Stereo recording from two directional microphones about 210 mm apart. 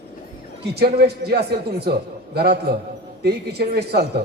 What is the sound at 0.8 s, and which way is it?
A man's voice, 50° right (ahead or behind).